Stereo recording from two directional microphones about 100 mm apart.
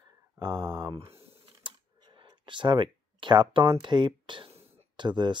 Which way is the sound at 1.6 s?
55° right (ahead or behind).